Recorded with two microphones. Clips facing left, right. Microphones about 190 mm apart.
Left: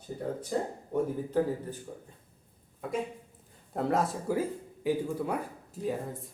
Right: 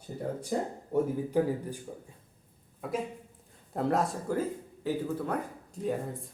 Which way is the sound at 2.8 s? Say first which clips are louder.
Even; centre (ahead or behind).